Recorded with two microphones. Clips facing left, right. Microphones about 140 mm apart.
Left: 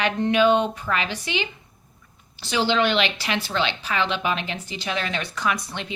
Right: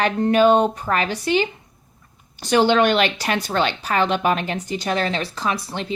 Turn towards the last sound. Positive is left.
turn(degrees=-35)  # may be behind; listen again after turning